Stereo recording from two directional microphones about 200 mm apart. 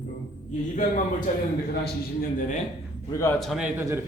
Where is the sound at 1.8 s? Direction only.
45° left (ahead or behind).